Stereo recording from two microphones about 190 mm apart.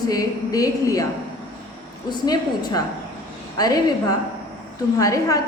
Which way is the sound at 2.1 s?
20° left (ahead or behind).